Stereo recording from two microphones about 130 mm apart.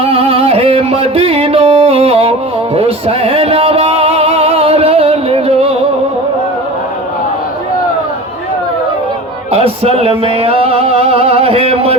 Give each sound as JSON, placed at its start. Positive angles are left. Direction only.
{"t": 0.1, "sound": "music", "side_deg": -45}
{"t": 9.5, "sound": "music", "side_deg": -50}